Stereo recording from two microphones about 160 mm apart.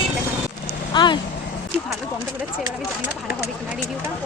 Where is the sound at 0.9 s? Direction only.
30° left (ahead or behind).